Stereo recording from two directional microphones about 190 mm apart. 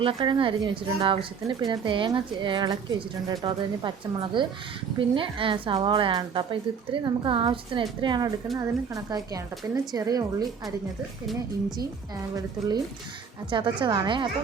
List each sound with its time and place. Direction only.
0.0 s speech: 30° right (ahead or behind)
12.3 s speech: 20° right (ahead or behind)